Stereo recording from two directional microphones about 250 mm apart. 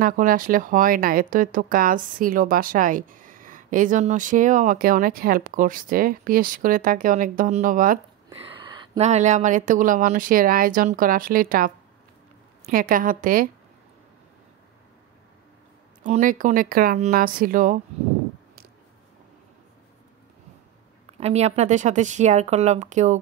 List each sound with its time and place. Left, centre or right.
0.0 s speech: right
8.3 s speech: right
16.0 s speech: right
21.2 s speech: right